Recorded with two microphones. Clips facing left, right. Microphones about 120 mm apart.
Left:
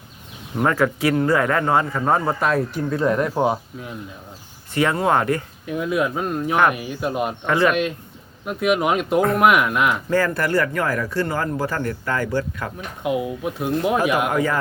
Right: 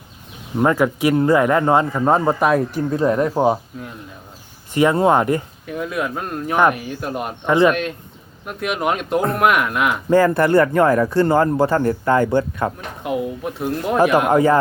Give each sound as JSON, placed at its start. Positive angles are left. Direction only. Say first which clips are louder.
{"t": 0.6, "sound": "speech", "louder": "right 3 dB", "side_deg": -15}
{"t": 3.0, "sound": "speech", "louder": "right 3 dB", "side_deg": -5}
{"t": 4.7, "sound": "speech", "louder": "right 4 dB", "side_deg": -15}
{"t": 5.6, "sound": "speech", "louder": "left 7 dB", "side_deg": 0}
{"t": 7.4, "sound": "speech", "louder": "right 5 dB", "side_deg": -25}
{"t": 7.7, "sound": "speech", "louder": "right 1 dB", "side_deg": 0}
{"t": 10.1, "sound": "speech", "louder": "right 6 dB", "side_deg": -20}
{"t": 13.0, "sound": "speech", "louder": "even", "side_deg": 5}
{"t": 14.3, "sound": "a man's voice", "louder": "right 7 dB", "side_deg": -30}